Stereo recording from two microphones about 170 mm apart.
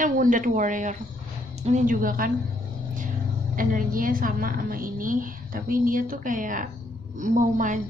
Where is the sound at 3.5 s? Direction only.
55° right (ahead or behind).